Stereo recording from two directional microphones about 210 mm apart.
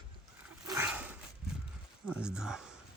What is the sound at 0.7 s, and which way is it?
Dog, 10° right (ahead or behind).